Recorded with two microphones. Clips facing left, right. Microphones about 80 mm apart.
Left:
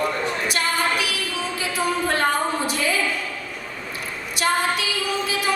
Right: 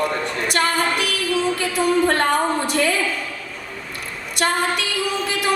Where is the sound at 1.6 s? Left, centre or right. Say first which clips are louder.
Right 3 dB; right.